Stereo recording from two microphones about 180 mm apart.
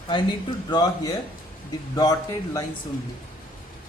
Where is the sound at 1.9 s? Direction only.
20° left (ahead or behind).